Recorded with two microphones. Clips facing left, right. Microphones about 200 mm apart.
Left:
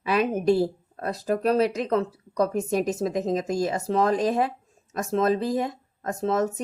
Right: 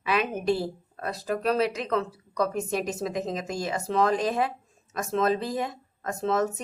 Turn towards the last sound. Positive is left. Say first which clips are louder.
# left 2 dB
turn(degrees=40)  # may be behind; listen again after turning